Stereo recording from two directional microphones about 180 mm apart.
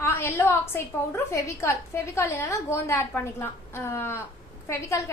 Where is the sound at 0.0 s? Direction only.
15° left (ahead or behind).